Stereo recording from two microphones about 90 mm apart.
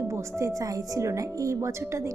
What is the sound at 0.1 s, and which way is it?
Speech, 35° right (ahead or behind).